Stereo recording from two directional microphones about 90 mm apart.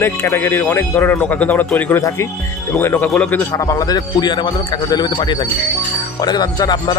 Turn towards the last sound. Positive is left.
turn(degrees=55)  # may be behind; listen again after turning